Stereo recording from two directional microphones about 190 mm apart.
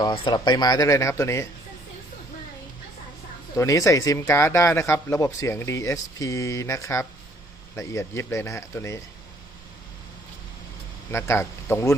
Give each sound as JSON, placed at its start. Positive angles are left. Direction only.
{"t": 0.0, "sound": "speech", "side_deg": 20}
{"t": 3.5, "sound": "speech", "side_deg": 15}
{"t": 11.1, "sound": "speech", "side_deg": 15}